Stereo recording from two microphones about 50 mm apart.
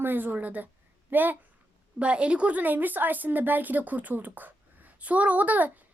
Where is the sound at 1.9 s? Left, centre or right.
Right.